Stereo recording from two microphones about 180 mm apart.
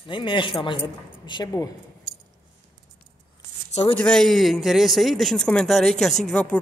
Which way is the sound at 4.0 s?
5° left (ahead or behind).